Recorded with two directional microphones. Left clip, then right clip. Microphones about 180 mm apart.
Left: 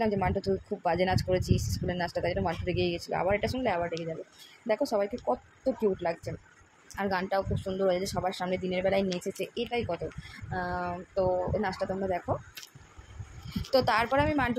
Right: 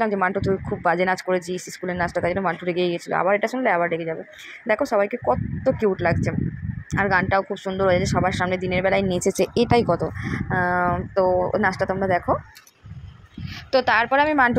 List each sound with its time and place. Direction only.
0.0 s speech: 15° right (ahead or behind)
9.2 s speech: 50° right (ahead or behind)
10.5 s speech: 30° right (ahead or behind)
13.7 s speech: 10° right (ahead or behind)
14.3 s speech: 25° right (ahead or behind)